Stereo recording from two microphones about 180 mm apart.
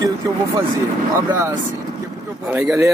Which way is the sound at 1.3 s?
15° right (ahead or behind).